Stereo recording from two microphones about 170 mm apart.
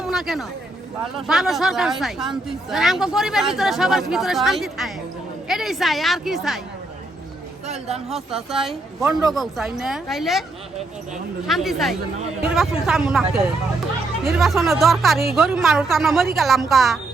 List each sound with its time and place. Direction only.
0.0 s a sound: centre (ahead or behind)
1.3 s a woman's voice: centre (ahead or behind)
7.7 s speech: 40° right (ahead or behind)
8.1 s a woman's voice: centre (ahead or behind)
11.4 s a woman's voice: centre (ahead or behind)
14.3 s a woman's voice: centre (ahead or behind)